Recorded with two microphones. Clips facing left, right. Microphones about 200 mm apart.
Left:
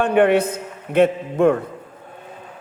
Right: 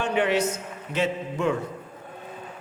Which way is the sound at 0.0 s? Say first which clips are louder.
Left 8 dB; 55° left (ahead or behind).